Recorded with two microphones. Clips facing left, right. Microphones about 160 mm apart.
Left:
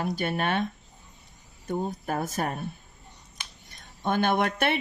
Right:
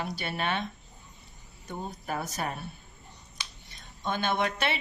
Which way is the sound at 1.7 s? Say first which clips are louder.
Left 6 dB; 45° left (ahead or behind).